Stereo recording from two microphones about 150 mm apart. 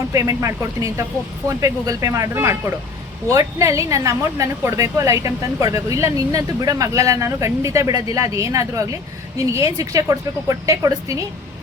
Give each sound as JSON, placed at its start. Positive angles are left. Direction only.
{"t": 0.1, "sound": "speech", "side_deg": -20}